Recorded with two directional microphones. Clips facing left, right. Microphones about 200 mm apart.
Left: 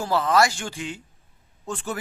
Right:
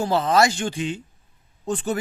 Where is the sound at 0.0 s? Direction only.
20° right (ahead or behind).